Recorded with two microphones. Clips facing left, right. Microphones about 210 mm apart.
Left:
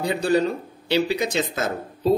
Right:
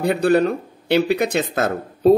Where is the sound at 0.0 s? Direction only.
60° right (ahead or behind).